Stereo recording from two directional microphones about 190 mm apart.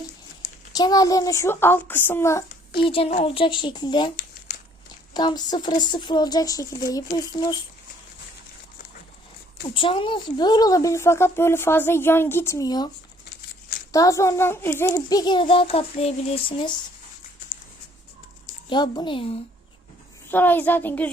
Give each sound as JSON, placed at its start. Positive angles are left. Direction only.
{"t": 0.7, "sound": "a woman's voice", "side_deg": 20}
{"t": 2.7, "sound": "a child's voice", "side_deg": 30}
{"t": 5.1, "sound": "a child's voice", "side_deg": 20}
{"t": 9.7, "sound": "a woman's voice", "side_deg": 25}
{"t": 13.9, "sound": "a child's voice", "side_deg": 15}
{"t": 18.7, "sound": "a child's voice", "side_deg": 25}
{"t": 20.3, "sound": "a woman's voice", "side_deg": 10}